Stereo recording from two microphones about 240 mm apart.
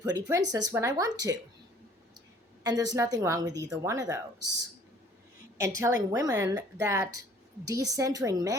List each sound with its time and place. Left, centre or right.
0.0 s a woman's voice: centre
2.6 s a woman's voice: centre
5.5 s a woman's voice: centre